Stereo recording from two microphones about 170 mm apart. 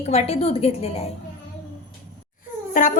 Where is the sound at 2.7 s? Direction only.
50° left (ahead or behind).